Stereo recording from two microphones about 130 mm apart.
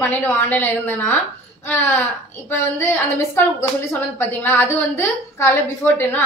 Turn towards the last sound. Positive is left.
turn(degrees=15)  # may be behind; listen again after turning